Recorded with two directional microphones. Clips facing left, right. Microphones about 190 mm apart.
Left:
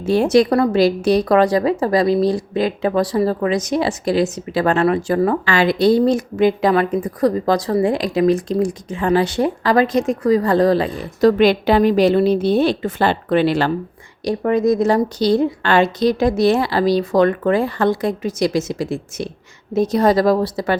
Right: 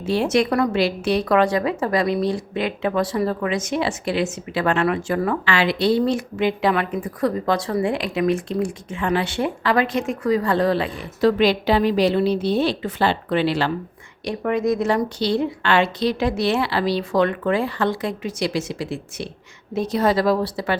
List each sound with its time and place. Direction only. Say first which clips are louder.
0.0 s a woman's voice: left 5 dB; 45° left (ahead or behind)
14.3 s a woman's voice: left 5 dB; 35° left (ahead or behind)